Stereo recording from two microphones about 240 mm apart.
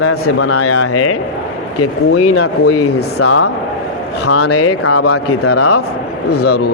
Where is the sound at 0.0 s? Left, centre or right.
Left.